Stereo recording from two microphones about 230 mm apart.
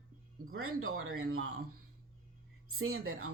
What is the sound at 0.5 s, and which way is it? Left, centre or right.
Speech, right.